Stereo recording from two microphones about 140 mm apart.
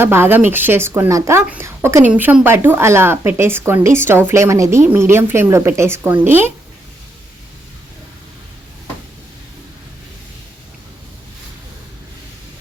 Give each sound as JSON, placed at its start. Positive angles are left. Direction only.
{"t": 0.0, "sound": "a woman's voice", "side_deg": -15}